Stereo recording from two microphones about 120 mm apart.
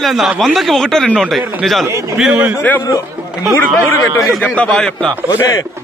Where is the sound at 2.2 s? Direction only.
5° right (ahead or behind).